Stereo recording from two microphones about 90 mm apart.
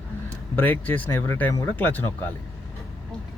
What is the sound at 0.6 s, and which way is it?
Speech, 20° left (ahead or behind).